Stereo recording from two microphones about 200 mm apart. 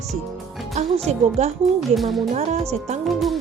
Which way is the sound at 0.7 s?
35° right (ahead or behind).